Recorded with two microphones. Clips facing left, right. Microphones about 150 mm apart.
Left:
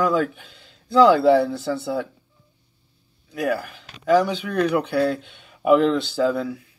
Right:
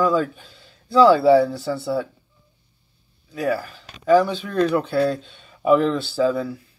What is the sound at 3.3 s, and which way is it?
Speech, 15° left (ahead or behind).